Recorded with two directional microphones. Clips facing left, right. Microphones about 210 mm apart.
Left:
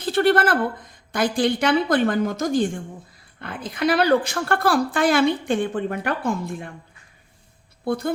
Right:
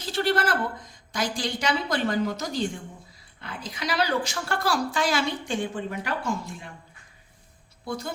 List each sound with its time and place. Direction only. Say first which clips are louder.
0.0 s a woman's voice: left 7 dB; 55° left (ahead or behind)
7.9 s a woman's voice: left 8 dB; 55° left (ahead or behind)